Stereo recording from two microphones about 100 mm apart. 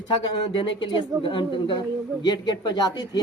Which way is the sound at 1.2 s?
55° left (ahead or behind).